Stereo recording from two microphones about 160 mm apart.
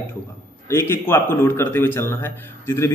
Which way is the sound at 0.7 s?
15° left (ahead or behind).